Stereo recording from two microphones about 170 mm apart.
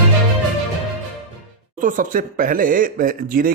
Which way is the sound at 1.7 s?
50° right (ahead or behind).